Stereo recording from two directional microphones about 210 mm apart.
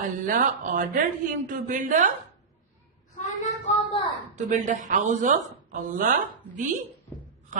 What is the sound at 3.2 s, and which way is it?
Child singing, 35° left (ahead or behind).